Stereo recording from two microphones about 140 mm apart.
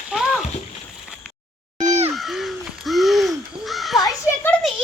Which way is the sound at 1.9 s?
50° right (ahead or behind).